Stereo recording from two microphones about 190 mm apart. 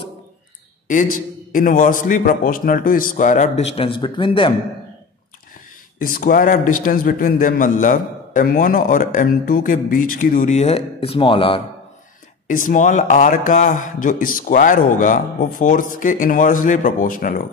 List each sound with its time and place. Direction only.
0.8 s a man's voice: 45° left (ahead or behind); by 4.6 s 25° left (ahead or behind)
5.9 s a man's voice: 45° left (ahead or behind); by 11.6 s 30° left (ahead or behind)
12.4 s a man's voice: 45° left (ahead or behind)